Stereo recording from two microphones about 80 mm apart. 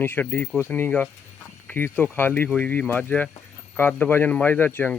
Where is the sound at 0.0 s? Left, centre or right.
Left.